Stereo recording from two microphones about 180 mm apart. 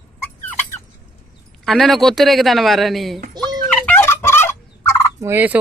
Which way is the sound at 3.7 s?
10° left (ahead or behind).